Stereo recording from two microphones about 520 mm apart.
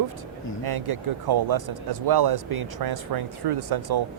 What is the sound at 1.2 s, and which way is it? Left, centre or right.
Speech, right.